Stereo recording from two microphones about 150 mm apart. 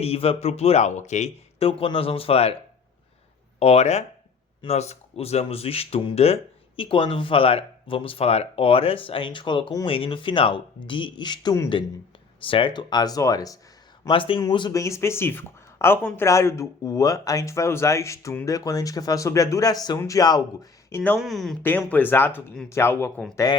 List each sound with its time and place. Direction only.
0.0 s speech: 40° left (ahead or behind)
3.6 s speech: 45° left (ahead or behind); by 11.7 s 25° left (ahead or behind)
12.5 s speech: 35° left (ahead or behind)
14.1 s speech: 35° left (ahead or behind)
21.2 s speech: centre (ahead or behind); by 23.6 s 25° left (ahead or behind)